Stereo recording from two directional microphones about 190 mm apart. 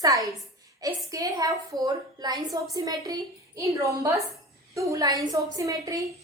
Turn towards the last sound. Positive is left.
turn(degrees=-15)  # may be behind; listen again after turning